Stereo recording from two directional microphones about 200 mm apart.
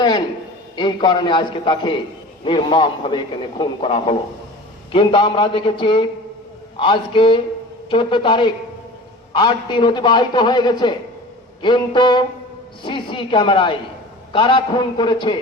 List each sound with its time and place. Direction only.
0.8 s a man's voice: 20° left (ahead or behind)